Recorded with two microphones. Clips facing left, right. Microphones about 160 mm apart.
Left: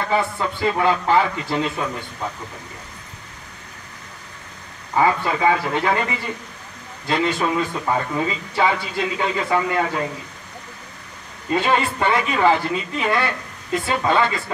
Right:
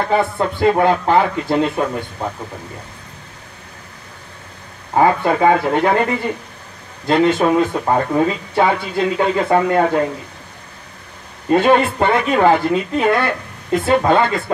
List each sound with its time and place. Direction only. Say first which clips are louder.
0.0 s speech: right 5 dB; 55° right (ahead or behind)
4.9 s speech: right 5 dB; 50° right (ahead or behind)
11.4 s speech: right 7 dB; 55° right (ahead or behind)